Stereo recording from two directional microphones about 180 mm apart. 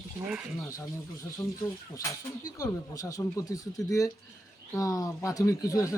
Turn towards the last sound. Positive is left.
turn(degrees=15)  # may be behind; listen again after turning